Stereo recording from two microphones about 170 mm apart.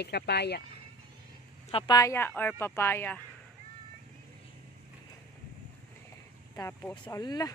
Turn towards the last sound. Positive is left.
turn(degrees=20)  # may be behind; listen again after turning